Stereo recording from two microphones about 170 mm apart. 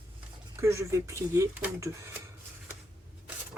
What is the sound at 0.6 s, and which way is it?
Speech, 15° right (ahead or behind).